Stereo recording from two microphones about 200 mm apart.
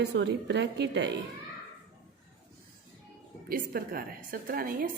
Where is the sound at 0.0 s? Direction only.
60° right (ahead or behind).